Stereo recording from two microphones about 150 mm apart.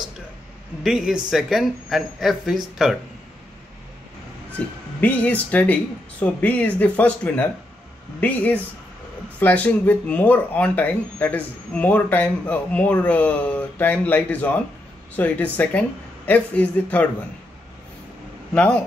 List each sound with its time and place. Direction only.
0.8 s speech: 5° right (ahead or behind)
5.0 s speech: 10° left (ahead or behind)
18.5 s speech: 10° left (ahead or behind)